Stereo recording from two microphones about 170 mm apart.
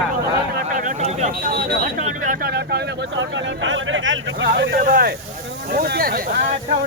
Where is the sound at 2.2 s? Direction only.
55° right (ahead or behind).